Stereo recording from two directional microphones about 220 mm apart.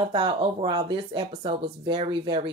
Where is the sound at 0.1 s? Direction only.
25° right (ahead or behind).